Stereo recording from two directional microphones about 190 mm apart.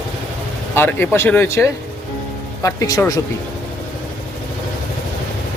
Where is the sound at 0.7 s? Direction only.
10° left (ahead or behind).